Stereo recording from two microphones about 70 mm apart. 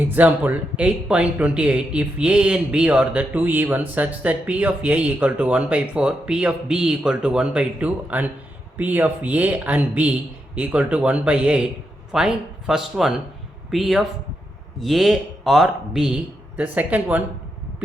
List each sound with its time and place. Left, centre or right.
0.0 s a man's voice: right; by 16.2 s centre
16.6 s speech: right